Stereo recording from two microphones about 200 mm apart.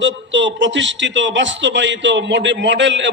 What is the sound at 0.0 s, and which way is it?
A man's voice, 65° right (ahead or behind).